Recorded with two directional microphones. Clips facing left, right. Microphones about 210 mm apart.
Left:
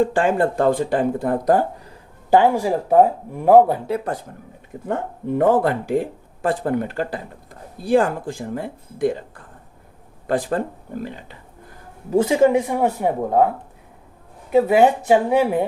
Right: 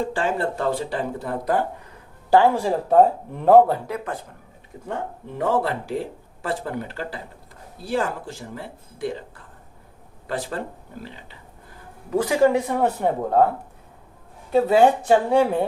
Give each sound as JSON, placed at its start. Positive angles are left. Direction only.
{"t": 0.1, "sound": "speech", "side_deg": 50}
{"t": 2.3, "sound": "speech", "side_deg": 15}
{"t": 3.8, "sound": "speech", "side_deg": 35}
{"t": 5.4, "sound": "speech", "side_deg": 50}
{"t": 12.1, "sound": "speech", "side_deg": 25}
{"t": 14.5, "sound": "speech", "side_deg": 10}